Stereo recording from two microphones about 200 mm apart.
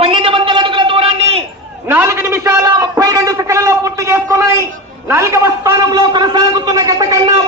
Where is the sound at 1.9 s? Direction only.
10° right (ahead or behind).